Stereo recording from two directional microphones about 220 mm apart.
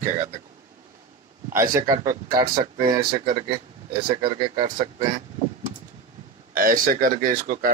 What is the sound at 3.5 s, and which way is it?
Speech, 20° right (ahead or behind).